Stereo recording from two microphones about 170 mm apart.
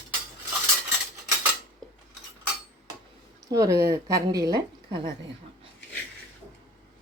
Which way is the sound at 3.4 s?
20° right (ahead or behind).